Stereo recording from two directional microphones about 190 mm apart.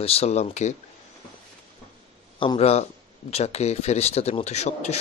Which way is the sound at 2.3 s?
25° left (ahead or behind).